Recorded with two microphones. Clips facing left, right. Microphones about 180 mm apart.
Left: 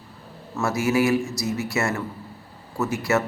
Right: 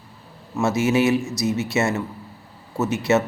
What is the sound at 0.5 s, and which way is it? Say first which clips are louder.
A man's voice: right 3 dB; 20° right (ahead or behind).